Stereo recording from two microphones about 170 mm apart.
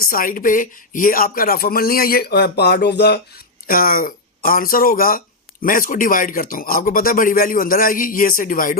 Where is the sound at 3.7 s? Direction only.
60° left (ahead or behind).